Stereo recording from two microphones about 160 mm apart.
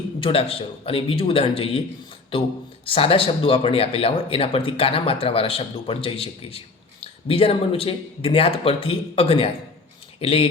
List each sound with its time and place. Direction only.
0.2 s speech: 35° left (ahead or behind)